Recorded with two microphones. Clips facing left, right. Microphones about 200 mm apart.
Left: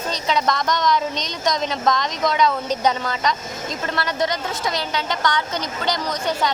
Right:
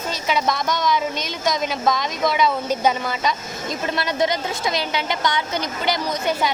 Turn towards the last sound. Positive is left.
turn(degrees=-10)  # may be behind; listen again after turning